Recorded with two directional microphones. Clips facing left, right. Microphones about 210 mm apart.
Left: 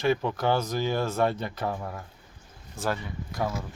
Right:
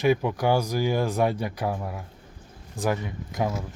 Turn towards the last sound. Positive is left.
turn(degrees=-15)  # may be behind; listen again after turning